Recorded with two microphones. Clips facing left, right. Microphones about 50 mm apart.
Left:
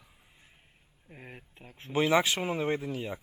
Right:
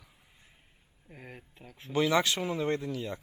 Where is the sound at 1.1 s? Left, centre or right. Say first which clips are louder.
Even; centre.